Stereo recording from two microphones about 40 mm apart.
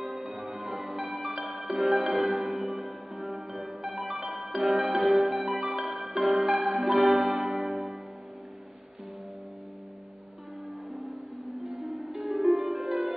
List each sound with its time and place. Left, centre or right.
0.0 s music: centre
10.9 s harp: centre